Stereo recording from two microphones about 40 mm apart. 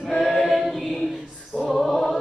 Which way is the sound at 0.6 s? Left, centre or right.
Centre.